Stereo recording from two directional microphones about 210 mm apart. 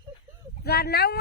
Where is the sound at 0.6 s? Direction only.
50° left (ahead or behind).